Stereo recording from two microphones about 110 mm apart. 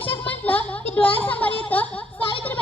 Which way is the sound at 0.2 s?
15° left (ahead or behind).